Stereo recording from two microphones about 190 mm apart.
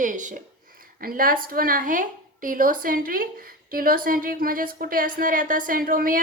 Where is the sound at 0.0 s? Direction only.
40° right (ahead or behind).